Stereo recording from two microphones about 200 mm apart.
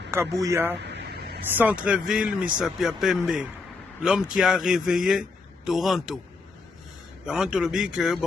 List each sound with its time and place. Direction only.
0.1 s speech: 15° right (ahead or behind)
0.9 s a sound: 55° right (ahead or behind)
1.5 s speech: 5° right (ahead or behind)
7.3 s speech: 5° right (ahead or behind)